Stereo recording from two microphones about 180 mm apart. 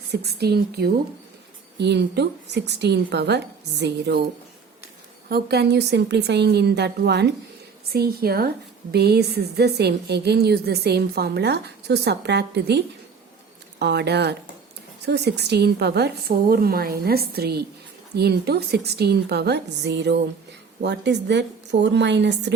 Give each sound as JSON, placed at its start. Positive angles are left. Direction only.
{"t": 0.1, "sound": "a woman's voice", "side_deg": -65}
{"t": 5.3, "sound": "a woman's voice", "side_deg": -65}